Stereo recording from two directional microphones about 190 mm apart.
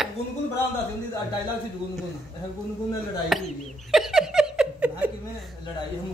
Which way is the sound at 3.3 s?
Centre (ahead or behind).